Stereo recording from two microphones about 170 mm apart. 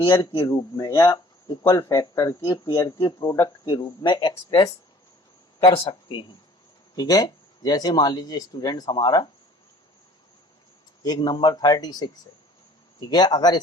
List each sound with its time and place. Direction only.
0.2 s speech: 25° left (ahead or behind)
11.0 s speech: 25° left (ahead or behind)